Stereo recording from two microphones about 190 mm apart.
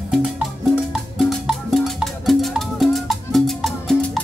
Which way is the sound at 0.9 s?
Centre (ahead or behind).